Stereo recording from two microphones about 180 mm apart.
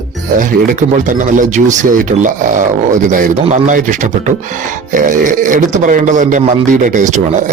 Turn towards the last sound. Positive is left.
turn(degrees=-40)  # may be behind; listen again after turning